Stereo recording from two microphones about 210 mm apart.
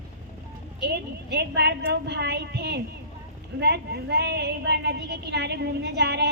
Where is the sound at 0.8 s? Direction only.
55° right (ahead or behind).